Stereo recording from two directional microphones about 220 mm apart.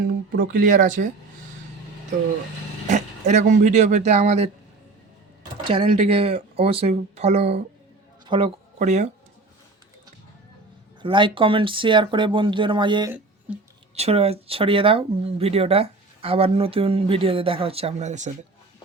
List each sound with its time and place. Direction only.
0.0 s speech: 40° right (ahead or behind)
2.9 s speech: 35° right (ahead or behind)
5.6 s speech: 25° right (ahead or behind)
11.0 s speech: 20° right (ahead or behind)
13.5 s speech: 5° right (ahead or behind)
13.9 s speech: 30° right (ahead or behind)